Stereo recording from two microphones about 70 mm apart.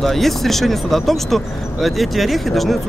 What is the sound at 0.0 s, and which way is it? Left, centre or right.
Speech, centre.